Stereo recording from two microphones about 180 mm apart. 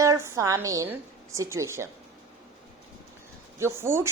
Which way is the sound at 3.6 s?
15° right (ahead or behind).